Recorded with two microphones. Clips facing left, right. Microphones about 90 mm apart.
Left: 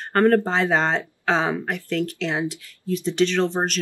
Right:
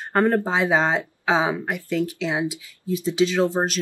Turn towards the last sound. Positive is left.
turn(degrees=-5)  # may be behind; listen again after turning